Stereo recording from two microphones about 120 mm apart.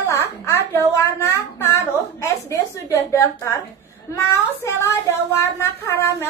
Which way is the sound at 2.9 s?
25° left (ahead or behind).